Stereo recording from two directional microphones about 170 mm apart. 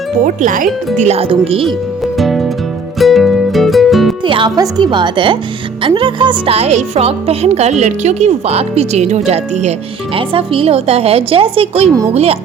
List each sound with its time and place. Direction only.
0.3 s speech: 50° right (ahead or behind)
0.9 s speech: 40° right (ahead or behind)
2.1 s music: centre (ahead or behind)
4.2 s speech: 30° right (ahead or behind)